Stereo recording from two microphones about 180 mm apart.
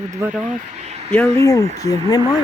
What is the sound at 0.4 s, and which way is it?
Speech, 40° right (ahead or behind).